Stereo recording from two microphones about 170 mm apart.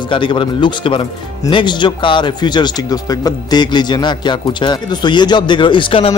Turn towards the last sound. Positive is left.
turn(degrees=30)  # may be behind; listen again after turning